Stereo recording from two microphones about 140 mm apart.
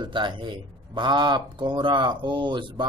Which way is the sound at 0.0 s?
35° right (ahead or behind).